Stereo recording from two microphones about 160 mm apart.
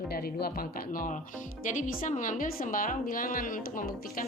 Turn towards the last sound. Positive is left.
turn(degrees=60)  # may be behind; listen again after turning